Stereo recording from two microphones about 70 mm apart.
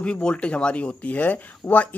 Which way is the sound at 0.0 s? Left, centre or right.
Centre.